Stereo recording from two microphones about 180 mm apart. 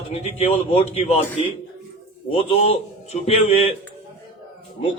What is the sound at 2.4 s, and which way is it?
A man's voice, 35° left (ahead or behind).